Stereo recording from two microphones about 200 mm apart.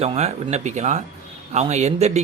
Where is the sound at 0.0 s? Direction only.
30° right (ahead or behind).